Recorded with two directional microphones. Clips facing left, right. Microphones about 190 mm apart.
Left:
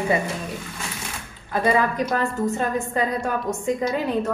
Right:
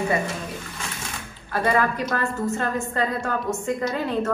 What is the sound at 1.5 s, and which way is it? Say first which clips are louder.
A woman's voice: left 1 dB; 15° left (ahead or behind).